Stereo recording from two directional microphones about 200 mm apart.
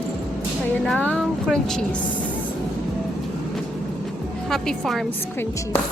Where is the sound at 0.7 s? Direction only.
5° left (ahead or behind).